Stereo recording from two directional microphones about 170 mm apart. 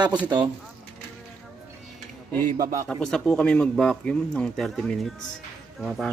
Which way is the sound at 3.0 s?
5° left (ahead or behind).